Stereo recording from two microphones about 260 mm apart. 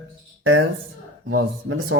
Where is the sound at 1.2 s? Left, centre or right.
Right.